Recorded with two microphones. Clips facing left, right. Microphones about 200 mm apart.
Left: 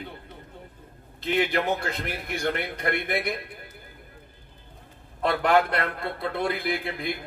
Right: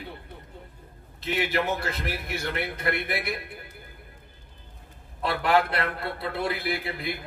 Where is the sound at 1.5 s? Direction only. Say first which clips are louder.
Left 1 dB; 55° left (ahead or behind).